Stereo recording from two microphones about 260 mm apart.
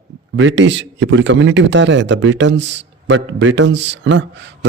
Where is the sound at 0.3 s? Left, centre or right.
Right.